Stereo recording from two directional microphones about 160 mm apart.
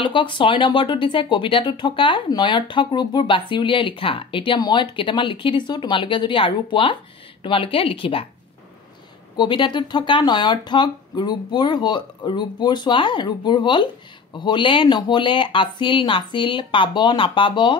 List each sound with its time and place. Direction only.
0.0 s speech: 30° left (ahead or behind)
9.4 s speech: 30° left (ahead or behind)